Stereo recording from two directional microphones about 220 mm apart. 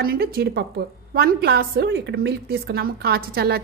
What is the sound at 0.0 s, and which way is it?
A woman's voice, 45° right (ahead or behind).